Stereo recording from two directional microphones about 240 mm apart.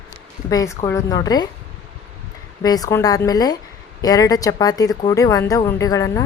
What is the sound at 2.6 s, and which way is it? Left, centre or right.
A woman's voice, centre.